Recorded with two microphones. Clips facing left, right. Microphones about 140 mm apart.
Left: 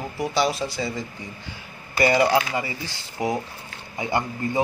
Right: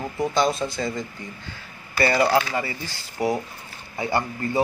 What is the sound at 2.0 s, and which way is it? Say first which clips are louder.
Speech: left 1 dB; 20° left (ahead or behind).